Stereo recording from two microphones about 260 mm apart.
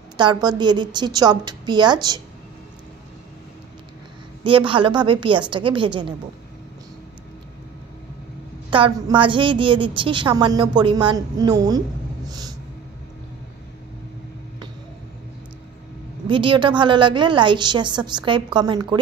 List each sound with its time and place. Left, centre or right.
0.2 s a woman's voice: centre
4.4 s a woman's voice: centre
8.6 s a woman's voice: centre
12.3 s a sound: centre
16.3 s a woman's voice: centre